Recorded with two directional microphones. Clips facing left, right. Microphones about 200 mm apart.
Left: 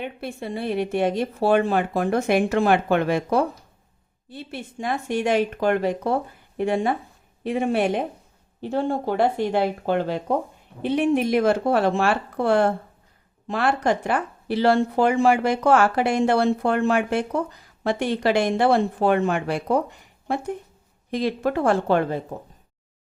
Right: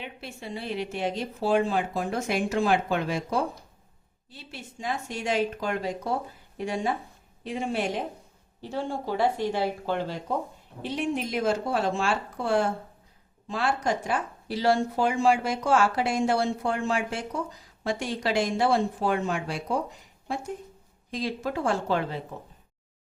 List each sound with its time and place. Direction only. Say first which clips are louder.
0.0 s speech: left 8 dB; 55° left (ahead or behind)